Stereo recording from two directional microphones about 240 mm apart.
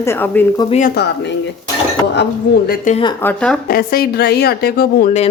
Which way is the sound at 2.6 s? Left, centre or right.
Left.